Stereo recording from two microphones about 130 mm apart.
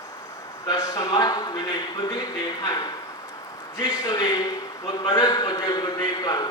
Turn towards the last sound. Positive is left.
turn(degrees=30)  # may be behind; listen again after turning